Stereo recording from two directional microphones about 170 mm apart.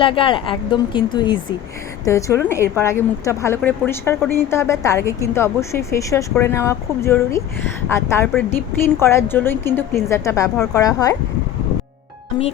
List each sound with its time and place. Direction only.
0.0 s a woman's voice: 30° left (ahead or behind)